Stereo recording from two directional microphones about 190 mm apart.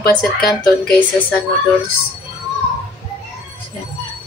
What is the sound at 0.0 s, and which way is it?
Speech, 55° left (ahead or behind).